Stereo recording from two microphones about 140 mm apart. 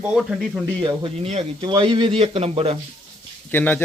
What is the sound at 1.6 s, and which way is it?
Speech, 35° right (ahead or behind).